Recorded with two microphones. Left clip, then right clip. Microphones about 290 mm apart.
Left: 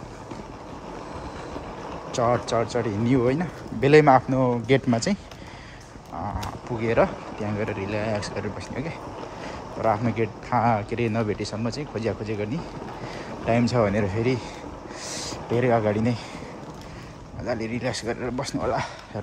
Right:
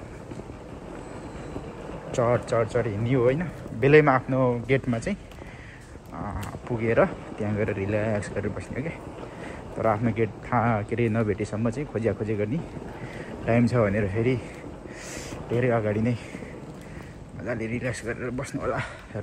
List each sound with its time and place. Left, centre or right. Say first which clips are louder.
2.1 s speech: left 1 dB; centre
6.2 s speech: left 2 dB; centre
13.5 s speech: left 1 dB; centre
17.5 s speech: left 2 dB; centre